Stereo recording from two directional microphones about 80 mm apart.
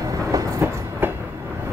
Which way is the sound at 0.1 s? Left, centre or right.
Right.